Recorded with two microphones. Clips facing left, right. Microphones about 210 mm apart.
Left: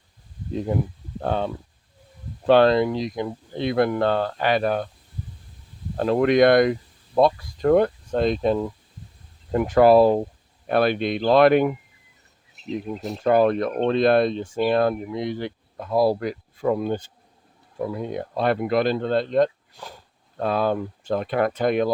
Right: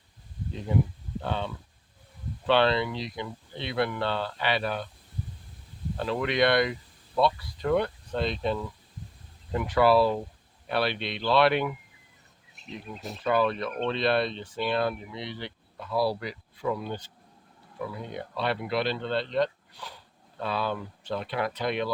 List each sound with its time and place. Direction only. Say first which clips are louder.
1.2 s speech: left 8 dB; 45° left (ahead or behind)
2.5 s speech: left 8 dB; 45° left (ahead or behind)
6.0 s speech: left 9 dB; 45° left (ahead or behind)
13.1 s speech: left 7 dB; 45° left (ahead or behind)